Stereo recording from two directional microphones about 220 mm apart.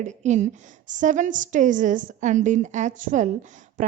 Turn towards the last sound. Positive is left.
turn(degrees=-35)  # may be behind; listen again after turning